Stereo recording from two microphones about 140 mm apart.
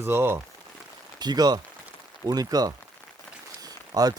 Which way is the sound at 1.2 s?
30° right (ahead or behind).